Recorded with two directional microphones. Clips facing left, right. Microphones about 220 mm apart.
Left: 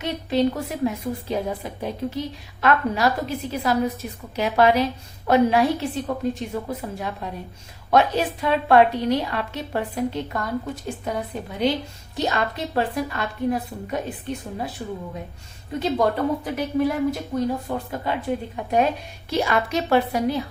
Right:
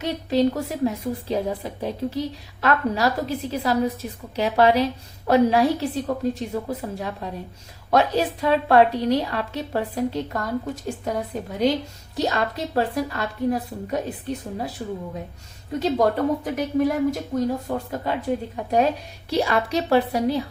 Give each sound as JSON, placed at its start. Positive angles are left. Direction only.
{"t": 0.0, "sound": "a woman's voice", "side_deg": -40}
{"t": 15.8, "sound": "a woman's voice", "side_deg": -40}